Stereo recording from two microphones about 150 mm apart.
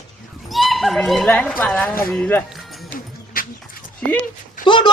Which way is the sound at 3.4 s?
70° left (ahead or behind).